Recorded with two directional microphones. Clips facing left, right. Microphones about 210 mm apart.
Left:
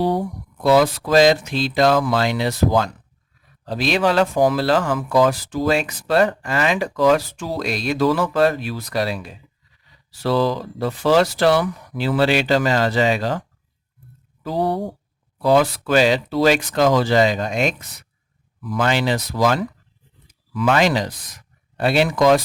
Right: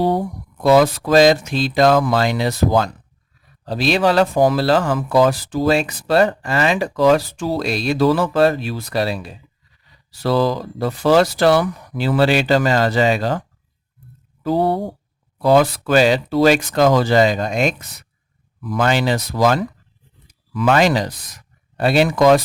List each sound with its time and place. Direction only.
0.6 s speech: 45° right (ahead or behind); by 9.3 s 30° right (ahead or behind)
10.2 s speech: 40° right (ahead or behind)
15.4 s speech: 40° right (ahead or behind)